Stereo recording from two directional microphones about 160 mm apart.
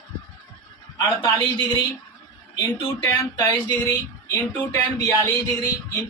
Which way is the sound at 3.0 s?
20° left (ahead or behind).